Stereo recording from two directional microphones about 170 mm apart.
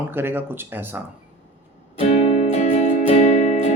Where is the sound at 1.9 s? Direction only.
40° left (ahead or behind).